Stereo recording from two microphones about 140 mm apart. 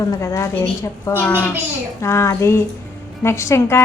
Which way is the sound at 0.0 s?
25° left (ahead or behind).